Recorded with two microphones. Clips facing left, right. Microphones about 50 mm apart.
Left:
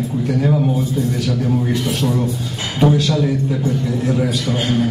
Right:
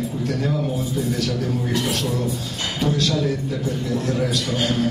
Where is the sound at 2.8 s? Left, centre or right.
Centre.